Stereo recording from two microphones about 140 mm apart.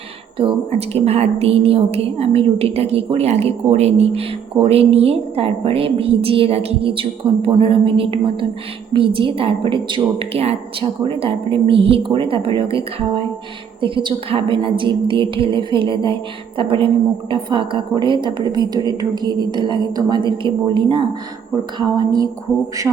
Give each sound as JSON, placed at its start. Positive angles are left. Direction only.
{"t": 0.3, "sound": "a woman's voice", "side_deg": -45}
{"t": 21.5, "sound": "speech", "side_deg": -30}